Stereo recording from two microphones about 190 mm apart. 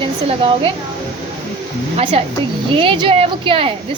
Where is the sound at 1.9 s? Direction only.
30° right (ahead or behind).